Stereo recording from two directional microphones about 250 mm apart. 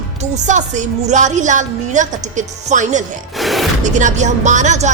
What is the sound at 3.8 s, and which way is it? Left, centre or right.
A woman's voice, right.